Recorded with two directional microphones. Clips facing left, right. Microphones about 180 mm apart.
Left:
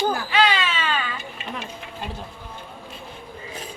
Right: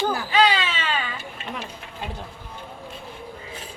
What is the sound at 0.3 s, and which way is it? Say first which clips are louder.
Baby cry: right 1 dB; 30° right (ahead or behind).